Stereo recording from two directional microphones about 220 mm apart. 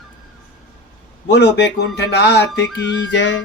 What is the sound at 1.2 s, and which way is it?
Speech, 50° left (ahead or behind).